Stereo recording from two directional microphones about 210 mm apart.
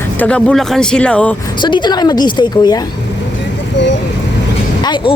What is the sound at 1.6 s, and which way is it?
A woman's voice, 20° left (ahead or behind).